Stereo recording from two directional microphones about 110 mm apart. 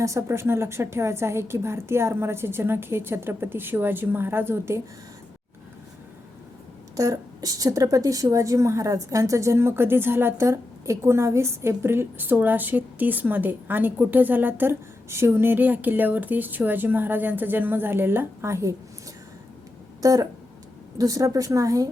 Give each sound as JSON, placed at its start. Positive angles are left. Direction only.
{"t": 0.0, "sound": "a woman's voice", "side_deg": -25}
{"t": 6.9, "sound": "a woman's voice", "side_deg": -30}
{"t": 20.0, "sound": "a sound", "side_deg": -35}
{"t": 21.0, "sound": "a woman's voice", "side_deg": -30}